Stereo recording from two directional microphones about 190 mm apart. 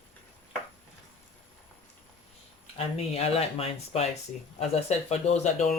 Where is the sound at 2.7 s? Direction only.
30° left (ahead or behind).